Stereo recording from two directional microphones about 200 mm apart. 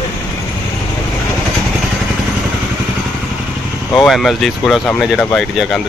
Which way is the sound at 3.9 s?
Centre (ahead or behind).